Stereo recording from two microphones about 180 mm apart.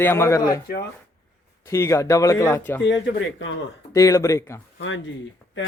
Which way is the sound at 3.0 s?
90° left.